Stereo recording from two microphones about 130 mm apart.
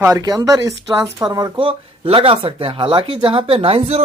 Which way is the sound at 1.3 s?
35° right (ahead or behind).